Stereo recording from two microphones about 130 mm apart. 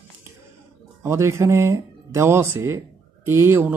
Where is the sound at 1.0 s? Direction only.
20° right (ahead or behind).